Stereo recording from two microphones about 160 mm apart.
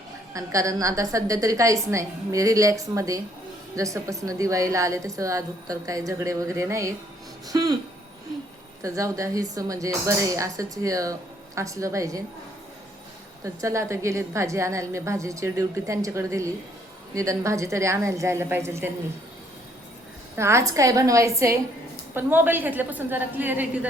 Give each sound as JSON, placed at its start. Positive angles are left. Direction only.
{"t": 0.3, "sound": "speech", "side_deg": -20}
{"t": 8.8, "sound": "speech", "side_deg": -20}
{"t": 13.4, "sound": "a woman's voice", "side_deg": -20}
{"t": 20.3, "sound": "a woman's voice", "side_deg": -15}